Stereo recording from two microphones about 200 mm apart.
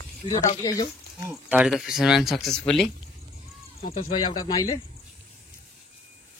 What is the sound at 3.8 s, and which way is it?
Speech, 35° left (ahead or behind).